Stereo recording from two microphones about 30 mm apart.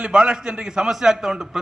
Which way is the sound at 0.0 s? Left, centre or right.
Right.